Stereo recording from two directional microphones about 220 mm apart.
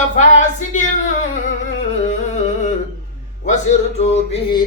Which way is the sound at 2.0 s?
35° left (ahead or behind).